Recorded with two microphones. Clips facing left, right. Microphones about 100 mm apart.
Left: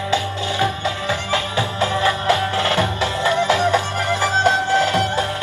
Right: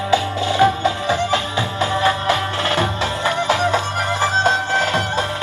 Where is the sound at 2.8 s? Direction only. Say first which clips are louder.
Even; 20° right (ahead or behind).